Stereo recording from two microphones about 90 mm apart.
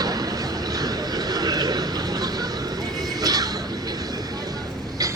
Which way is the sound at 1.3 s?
45° right (ahead or behind).